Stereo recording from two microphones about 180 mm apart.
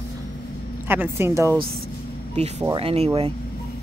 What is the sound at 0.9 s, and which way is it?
Speech, 10° right (ahead or behind).